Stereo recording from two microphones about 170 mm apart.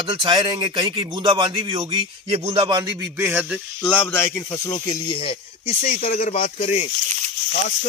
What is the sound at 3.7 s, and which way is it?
Speech, 5° left (ahead or behind).